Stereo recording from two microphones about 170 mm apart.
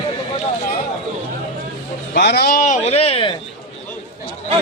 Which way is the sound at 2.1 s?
80° left.